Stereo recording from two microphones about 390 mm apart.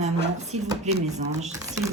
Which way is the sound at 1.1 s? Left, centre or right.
Centre.